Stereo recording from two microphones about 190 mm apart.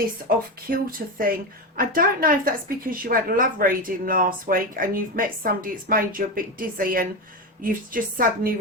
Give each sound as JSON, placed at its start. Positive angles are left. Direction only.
{"t": 0.3, "sound": "a woman's voice", "side_deg": -50}